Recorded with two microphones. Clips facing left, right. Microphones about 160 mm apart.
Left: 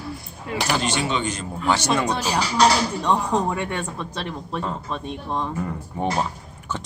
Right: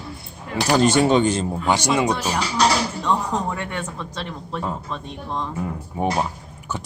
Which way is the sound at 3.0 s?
15° left (ahead or behind).